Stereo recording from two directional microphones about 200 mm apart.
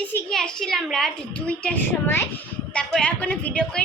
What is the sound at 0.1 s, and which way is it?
A woman's voice, 5° left (ahead or behind).